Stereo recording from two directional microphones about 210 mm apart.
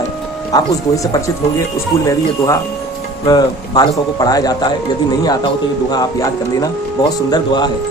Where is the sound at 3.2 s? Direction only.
20° left (ahead or behind).